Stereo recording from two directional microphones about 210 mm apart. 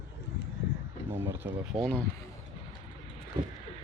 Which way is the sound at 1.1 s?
15° right (ahead or behind).